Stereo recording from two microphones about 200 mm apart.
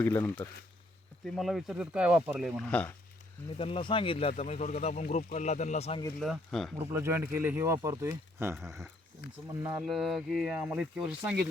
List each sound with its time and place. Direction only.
0.0 s speech: 10° left (ahead or behind)
3.6 s speech: 25° left (ahead or behind)
6.1 s speech: centre (ahead or behind)
6.7 s speech: 15° right (ahead or behind)
8.5 s speech: centre (ahead or behind)